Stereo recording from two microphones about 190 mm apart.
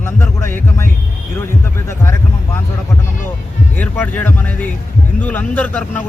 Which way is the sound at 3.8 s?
10° left (ahead or behind).